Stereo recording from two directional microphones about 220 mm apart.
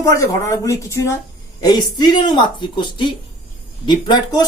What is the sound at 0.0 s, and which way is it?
A man's voice, 15° left (ahead or behind).